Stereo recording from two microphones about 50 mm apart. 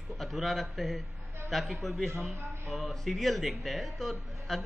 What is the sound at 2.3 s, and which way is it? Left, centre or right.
Speech, right.